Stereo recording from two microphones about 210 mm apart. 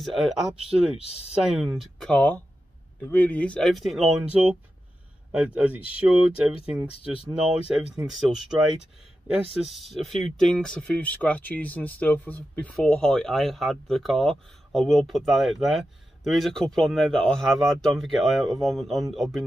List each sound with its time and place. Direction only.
0.0 s speech: centre (ahead or behind)
1.0 s speech: 30° left (ahead or behind)
1.4 s speech: centre (ahead or behind)